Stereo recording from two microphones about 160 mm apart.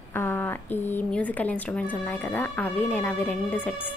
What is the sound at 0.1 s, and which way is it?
A woman's voice, 15° left (ahead or behind).